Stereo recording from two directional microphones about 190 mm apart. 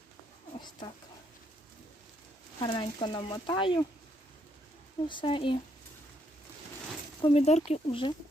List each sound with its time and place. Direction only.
0.6 s speech: 25° left (ahead or behind)
2.6 s speech: 25° left (ahead or behind)
5.0 s speech: 25° left (ahead or behind)
7.2 s speech: 30° left (ahead or behind)